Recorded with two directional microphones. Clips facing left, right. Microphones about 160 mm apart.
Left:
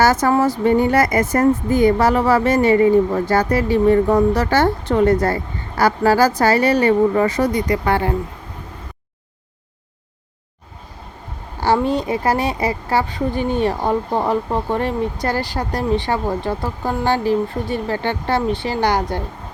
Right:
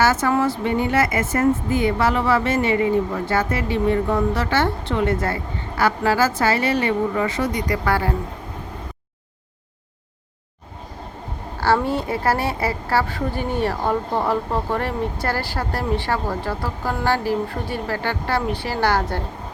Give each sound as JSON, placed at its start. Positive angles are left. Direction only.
{"t": 0.0, "sound": "speech", "side_deg": 40}
{"t": 7.7, "sound": "speech", "side_deg": 20}
{"t": 11.6, "sound": "speech", "side_deg": 15}